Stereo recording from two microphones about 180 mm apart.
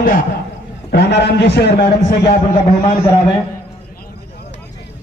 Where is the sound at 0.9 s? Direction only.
65° left (ahead or behind).